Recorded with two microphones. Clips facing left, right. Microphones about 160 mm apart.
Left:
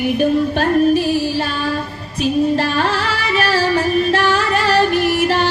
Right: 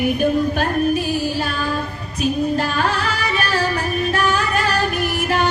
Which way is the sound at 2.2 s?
30° left (ahead or behind).